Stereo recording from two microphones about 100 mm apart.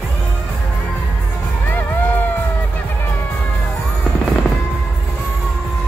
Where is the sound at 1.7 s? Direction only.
20° left (ahead or behind).